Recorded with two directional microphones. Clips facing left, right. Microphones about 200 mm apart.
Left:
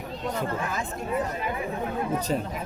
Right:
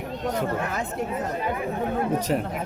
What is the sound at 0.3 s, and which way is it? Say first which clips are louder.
Speech: right 2 dB; 65° right (ahead or behind).